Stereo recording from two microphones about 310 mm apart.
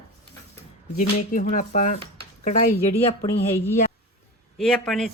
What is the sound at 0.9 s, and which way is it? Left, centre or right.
Speech, left.